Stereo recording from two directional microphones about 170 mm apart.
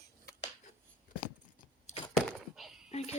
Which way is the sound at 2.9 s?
40° left (ahead or behind).